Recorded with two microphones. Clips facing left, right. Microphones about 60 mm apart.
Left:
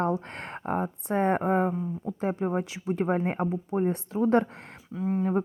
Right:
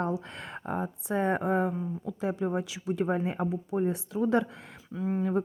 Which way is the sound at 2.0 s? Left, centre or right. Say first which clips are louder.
Left 2 dB; left.